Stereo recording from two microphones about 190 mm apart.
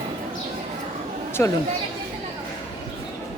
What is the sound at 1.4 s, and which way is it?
Speech, 10° left (ahead or behind).